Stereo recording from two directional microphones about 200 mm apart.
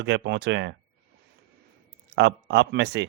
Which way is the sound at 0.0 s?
60° right (ahead or behind).